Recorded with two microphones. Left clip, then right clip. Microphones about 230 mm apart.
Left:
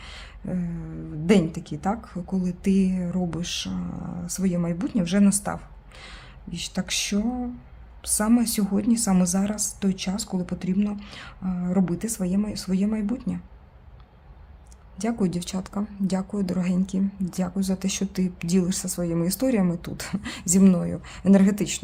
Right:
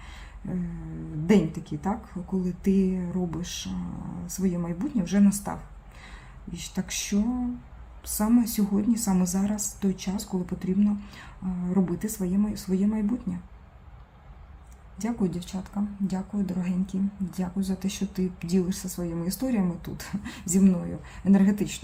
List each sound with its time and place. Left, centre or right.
0.0 s a sound: left
1.3 s a woman's voice: left
14.9 s speech: left